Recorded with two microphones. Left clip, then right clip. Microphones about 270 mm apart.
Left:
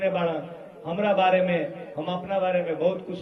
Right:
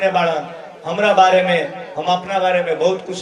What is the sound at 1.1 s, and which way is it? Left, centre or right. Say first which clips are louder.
A man's voice: right 9 dB; right.